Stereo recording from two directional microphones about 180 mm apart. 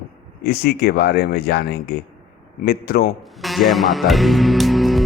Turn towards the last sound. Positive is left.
turn(degrees=0)  # may be behind; listen again after turning